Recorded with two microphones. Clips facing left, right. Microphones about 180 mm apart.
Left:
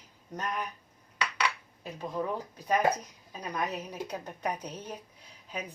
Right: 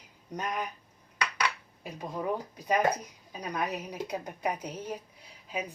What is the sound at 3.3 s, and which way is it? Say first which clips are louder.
Speech: right 1 dB; 10° right (ahead or behind).